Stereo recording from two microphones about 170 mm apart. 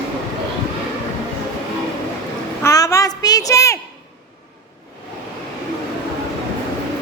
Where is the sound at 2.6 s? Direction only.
20° left (ahead or behind).